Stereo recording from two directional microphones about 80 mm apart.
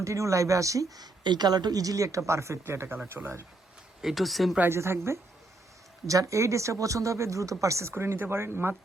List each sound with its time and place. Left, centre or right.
0.0 s speech: right
4.0 s speech: centre
4.7 s speech: right